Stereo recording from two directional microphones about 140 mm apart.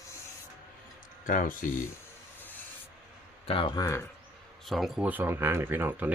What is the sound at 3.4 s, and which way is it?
Speech, 40° left (ahead or behind).